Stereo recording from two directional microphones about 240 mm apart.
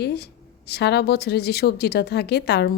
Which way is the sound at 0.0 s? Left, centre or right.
Left.